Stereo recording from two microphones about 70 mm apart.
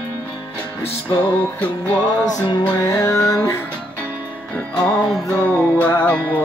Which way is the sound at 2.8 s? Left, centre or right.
Left.